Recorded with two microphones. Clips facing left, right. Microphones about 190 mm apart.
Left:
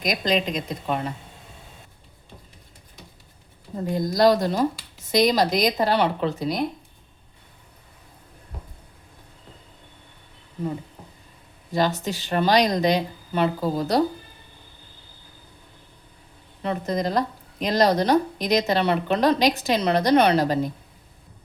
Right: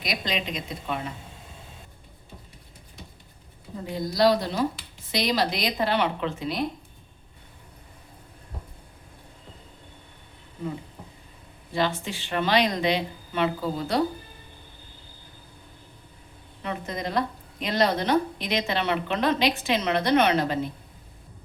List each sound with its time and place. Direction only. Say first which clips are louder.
0.0 s speech: left 6 dB; 45° left (ahead or behind)
3.8 s speech: left 3 dB; 45° left (ahead or behind)
11.7 s a woman's voice: left 3 dB; 40° left (ahead or behind)
16.6 s a woman's voice: left 6 dB; 40° left (ahead or behind)